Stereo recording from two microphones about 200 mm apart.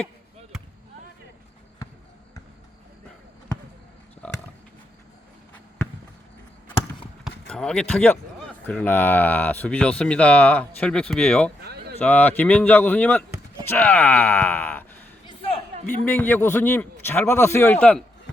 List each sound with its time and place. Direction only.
7.3 s speech: 5° left (ahead or behind)
11.6 s a sound: 55° right (ahead or behind)
11.9 s speech: 10° left (ahead or behind)
16.0 s speech: 10° left (ahead or behind)